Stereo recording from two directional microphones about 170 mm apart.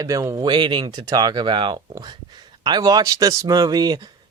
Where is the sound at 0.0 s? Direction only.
20° right (ahead or behind).